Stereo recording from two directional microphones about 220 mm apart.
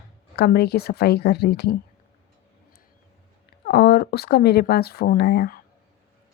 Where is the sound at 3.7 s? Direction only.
45° left (ahead or behind).